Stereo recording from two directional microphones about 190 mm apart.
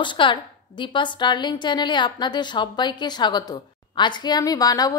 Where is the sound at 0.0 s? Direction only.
25° left (ahead or behind).